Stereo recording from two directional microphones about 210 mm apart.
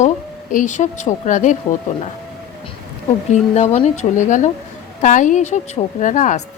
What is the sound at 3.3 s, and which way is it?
Speech, 30° left (ahead or behind).